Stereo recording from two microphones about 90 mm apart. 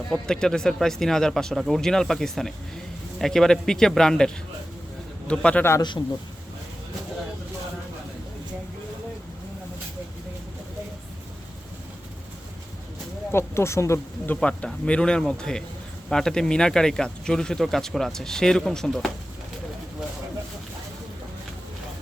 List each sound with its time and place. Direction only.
0.1 s speech: 5° left (ahead or behind)
5.3 s speech: 10° left (ahead or behind)
13.3 s speech: 30° left (ahead or behind)
14.3 s speech: 10° left (ahead or behind)